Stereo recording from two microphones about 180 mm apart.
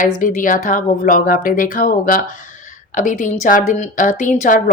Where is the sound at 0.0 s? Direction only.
45° left (ahead or behind).